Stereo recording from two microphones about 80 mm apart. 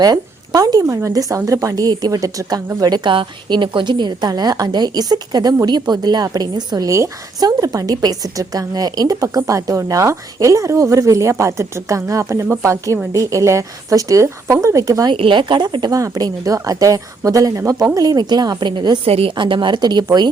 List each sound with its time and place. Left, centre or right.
0.0 s a woman's voice: right
2.8 s a woman's voice: right
6.8 s a woman's voice: right
15.3 s speech: right
16.0 s a woman's voice: right
19.4 s a woman's voice: right